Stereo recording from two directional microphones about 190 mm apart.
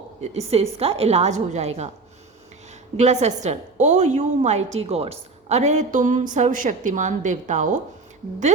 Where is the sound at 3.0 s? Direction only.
35° right (ahead or behind).